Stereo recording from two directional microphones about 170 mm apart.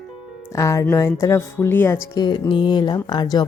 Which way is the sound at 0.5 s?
20° left (ahead or behind).